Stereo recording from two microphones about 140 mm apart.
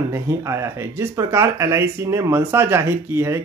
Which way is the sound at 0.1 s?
20° right (ahead or behind).